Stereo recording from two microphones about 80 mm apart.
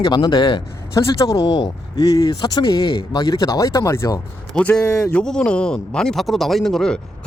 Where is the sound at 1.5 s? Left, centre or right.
Left.